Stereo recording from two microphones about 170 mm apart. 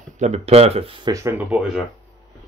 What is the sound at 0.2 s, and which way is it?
Speech, 40° right (ahead or behind).